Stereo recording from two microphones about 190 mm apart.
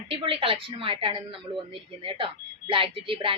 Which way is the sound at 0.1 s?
30° right (ahead or behind).